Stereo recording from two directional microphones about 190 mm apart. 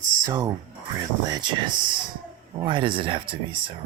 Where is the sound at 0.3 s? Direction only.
20° right (ahead or behind).